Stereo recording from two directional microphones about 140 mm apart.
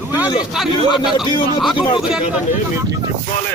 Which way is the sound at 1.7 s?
35° left (ahead or behind).